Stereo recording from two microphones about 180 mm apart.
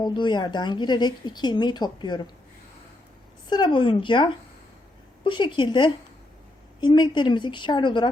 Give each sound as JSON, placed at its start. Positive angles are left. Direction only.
{"t": 0.0, "sound": "a woman's voice", "side_deg": 25}
{"t": 3.5, "sound": "a woman's voice", "side_deg": 25}